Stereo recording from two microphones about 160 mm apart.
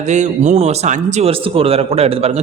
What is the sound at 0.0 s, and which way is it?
Speech, 45° right (ahead or behind).